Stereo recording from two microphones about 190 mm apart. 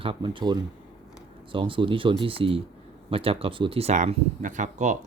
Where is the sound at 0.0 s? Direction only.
25° right (ahead or behind).